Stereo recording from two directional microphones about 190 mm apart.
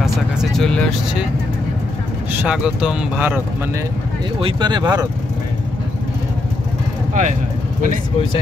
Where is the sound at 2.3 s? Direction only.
5° right (ahead or behind).